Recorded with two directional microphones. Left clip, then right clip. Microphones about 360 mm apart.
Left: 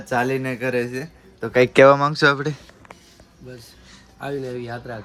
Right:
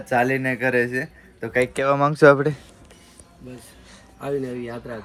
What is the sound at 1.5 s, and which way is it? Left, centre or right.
Speech, left.